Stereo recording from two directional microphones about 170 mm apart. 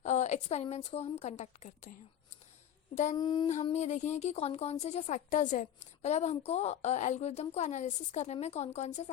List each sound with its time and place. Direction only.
0.0 s a woman's voice: 45° left (ahead or behind)
2.9 s a sound: 45° left (ahead or behind)
3.2 s female singing: 25° left (ahead or behind)
3.5 s speech: 40° left (ahead or behind)